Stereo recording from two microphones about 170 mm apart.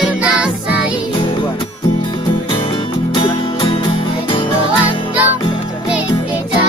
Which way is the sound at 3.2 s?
30° left (ahead or behind).